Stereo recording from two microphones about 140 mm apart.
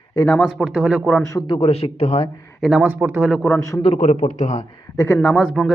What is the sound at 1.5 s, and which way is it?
Speech, 45° left (ahead or behind).